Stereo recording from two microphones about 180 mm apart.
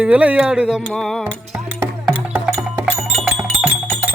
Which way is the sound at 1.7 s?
10° right (ahead or behind).